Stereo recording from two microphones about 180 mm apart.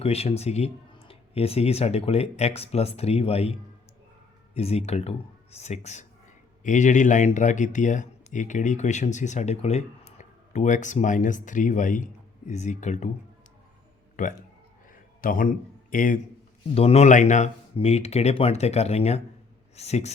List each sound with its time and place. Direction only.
0.0 s speech: 35° left (ahead or behind)
4.5 s speech: 35° left (ahead or behind)
15.2 s a man's voice: 50° left (ahead or behind)
16.7 s speech: 35° left (ahead or behind)